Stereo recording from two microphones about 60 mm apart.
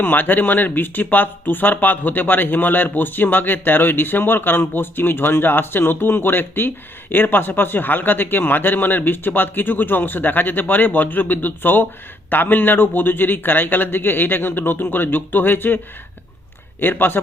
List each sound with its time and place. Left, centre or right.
0.0 s speech: left
16.8 s speech: left